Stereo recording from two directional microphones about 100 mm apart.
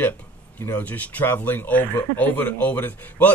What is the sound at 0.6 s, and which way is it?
Speech, 20° left (ahead or behind).